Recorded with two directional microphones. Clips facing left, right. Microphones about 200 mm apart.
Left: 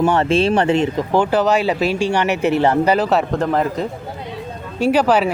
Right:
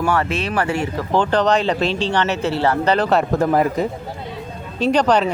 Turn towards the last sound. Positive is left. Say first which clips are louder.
# left 1 dB
turn(degrees=5)  # may be behind; listen again after turning